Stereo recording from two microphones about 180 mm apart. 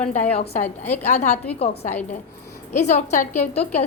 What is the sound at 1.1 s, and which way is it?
Speech, 40° left (ahead or behind).